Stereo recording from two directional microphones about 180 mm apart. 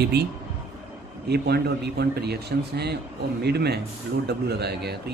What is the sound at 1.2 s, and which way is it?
Speech, 65° right (ahead or behind).